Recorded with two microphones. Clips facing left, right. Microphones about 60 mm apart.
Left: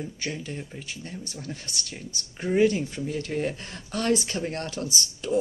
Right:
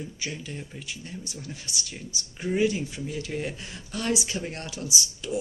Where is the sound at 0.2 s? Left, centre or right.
Left.